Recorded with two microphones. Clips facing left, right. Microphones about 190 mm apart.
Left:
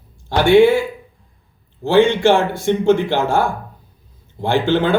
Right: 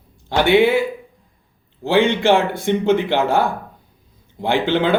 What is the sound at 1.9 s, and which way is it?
Speech, 15° right (ahead or behind).